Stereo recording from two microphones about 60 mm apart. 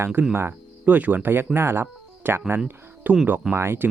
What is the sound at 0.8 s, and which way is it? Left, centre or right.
Speech, right.